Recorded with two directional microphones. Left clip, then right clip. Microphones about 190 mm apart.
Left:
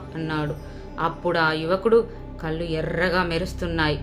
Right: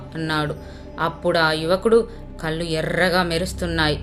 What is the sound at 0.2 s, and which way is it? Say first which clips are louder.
Speech: right 4 dB; 15° right (ahead or behind).